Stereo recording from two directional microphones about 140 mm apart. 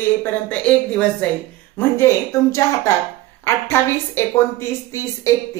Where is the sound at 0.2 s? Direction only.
10° left (ahead or behind).